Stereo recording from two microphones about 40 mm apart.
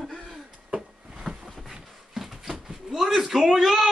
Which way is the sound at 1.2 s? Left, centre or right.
Left.